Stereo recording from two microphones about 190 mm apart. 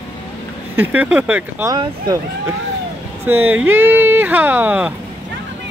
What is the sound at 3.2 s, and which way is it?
Speech, 10° right (ahead or behind).